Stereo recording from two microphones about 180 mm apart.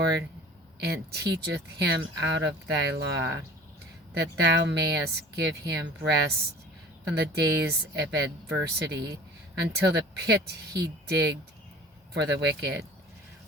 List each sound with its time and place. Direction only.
0.0 s speech: 70° right (ahead or behind)
4.1 s speech: 70° right (ahead or behind)
7.2 s speech: 70° right (ahead or behind)